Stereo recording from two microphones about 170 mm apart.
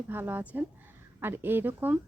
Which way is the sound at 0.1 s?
10° right (ahead or behind).